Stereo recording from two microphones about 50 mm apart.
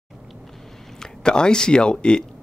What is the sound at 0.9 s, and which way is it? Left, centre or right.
Speech, centre.